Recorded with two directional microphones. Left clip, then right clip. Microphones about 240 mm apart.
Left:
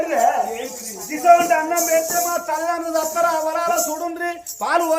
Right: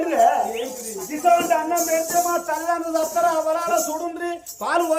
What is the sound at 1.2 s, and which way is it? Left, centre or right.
Music, centre.